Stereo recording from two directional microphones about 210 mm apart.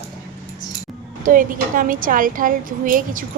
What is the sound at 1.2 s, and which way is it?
A woman's voice, 40° right (ahead or behind).